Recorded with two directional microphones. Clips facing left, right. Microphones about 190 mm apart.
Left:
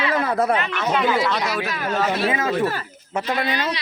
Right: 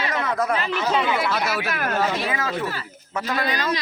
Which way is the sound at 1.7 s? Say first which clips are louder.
Even; 60° right (ahead or behind).